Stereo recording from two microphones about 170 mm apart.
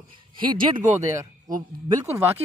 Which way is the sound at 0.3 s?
25° right (ahead or behind).